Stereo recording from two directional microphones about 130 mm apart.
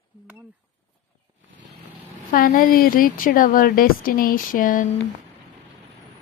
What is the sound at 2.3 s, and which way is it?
A woman's voice, 90° left.